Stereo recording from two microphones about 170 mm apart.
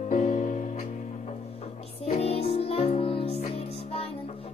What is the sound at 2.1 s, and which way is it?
Music, 35° left (ahead or behind).